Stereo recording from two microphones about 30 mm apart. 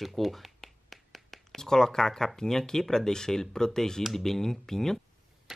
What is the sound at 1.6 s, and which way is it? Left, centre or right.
Speech, centre.